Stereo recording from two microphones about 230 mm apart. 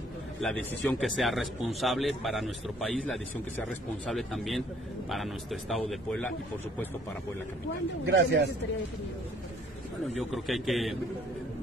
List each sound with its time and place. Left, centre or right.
0.4 s speech: centre
8.0 s speech: right
10.3 s speech: centre